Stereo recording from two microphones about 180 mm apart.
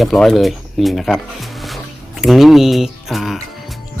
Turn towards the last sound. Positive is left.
turn(degrees=0)  # may be behind; listen again after turning